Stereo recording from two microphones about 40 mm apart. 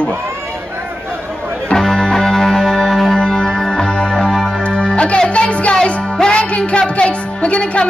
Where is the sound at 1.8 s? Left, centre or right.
Centre.